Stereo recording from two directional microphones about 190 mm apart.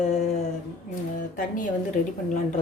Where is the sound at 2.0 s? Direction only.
45° left (ahead or behind).